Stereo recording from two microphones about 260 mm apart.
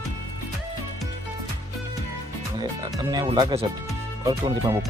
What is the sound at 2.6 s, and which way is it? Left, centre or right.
Speech, centre.